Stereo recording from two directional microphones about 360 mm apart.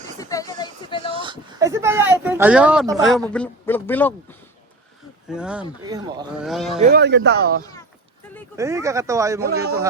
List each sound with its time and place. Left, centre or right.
0.2 s a sound: centre
1.1 s a sound: centre
5.3 s speech: centre
6.5 s speech: centre
6.7 s speech: right
7.6 s speech: centre
8.5 s speech: centre